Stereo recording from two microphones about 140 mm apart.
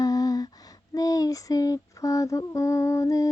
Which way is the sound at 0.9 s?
25° left (ahead or behind).